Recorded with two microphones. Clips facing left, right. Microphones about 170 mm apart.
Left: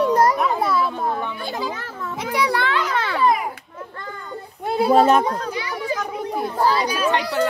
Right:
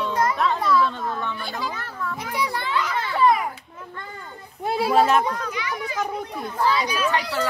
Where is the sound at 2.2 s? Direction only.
80° left.